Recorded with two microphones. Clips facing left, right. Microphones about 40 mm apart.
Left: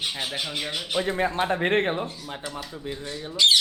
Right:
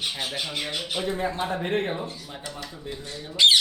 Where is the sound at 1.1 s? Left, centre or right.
Left.